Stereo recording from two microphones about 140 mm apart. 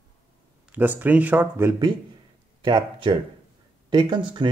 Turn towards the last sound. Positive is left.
turn(degrees=-35)  # may be behind; listen again after turning